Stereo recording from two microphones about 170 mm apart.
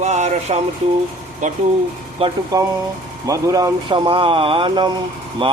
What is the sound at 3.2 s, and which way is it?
Speech, 20° right (ahead or behind).